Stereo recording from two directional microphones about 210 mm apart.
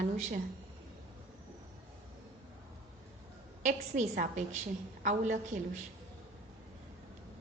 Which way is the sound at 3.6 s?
35° right (ahead or behind).